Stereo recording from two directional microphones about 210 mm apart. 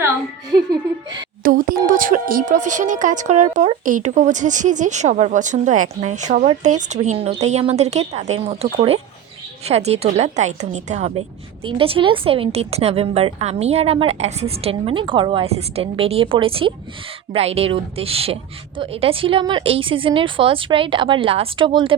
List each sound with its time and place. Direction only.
0.5 s a woman's voice: 20° right (ahead or behind)
1.5 s speech: 40° right (ahead or behind)
9.6 s a woman's voice: 30° right (ahead or behind)